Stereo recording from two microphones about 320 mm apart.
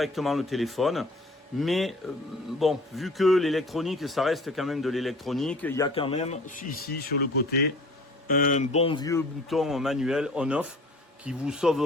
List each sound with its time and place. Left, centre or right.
0.0 s a man's voice: centre; by 6.9 s left
8.3 s speech: left
9.5 s a man's voice: centre